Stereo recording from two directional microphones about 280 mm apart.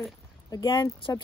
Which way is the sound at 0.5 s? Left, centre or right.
Centre.